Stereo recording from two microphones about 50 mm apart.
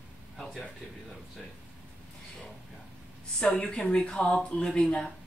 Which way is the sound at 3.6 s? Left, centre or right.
Centre.